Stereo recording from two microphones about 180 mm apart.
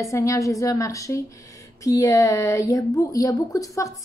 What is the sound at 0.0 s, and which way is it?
A woman's voice, 15° left (ahead or behind).